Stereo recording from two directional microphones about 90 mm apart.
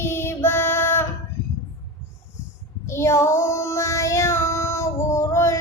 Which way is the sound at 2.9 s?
30° left (ahead or behind).